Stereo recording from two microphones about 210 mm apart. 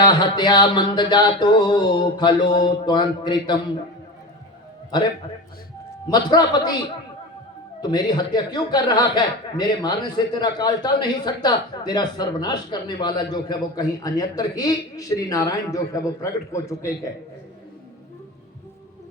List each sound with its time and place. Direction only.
0.0 s a man's voice: 20° left (ahead or behind)
6.1 s a man's voice: 20° left (ahead or behind)
7.8 s a man's voice: 20° left (ahead or behind)